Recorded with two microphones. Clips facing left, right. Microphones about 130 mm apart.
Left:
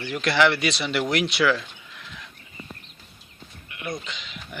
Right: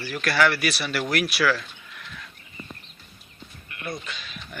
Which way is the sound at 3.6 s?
15° left (ahead or behind).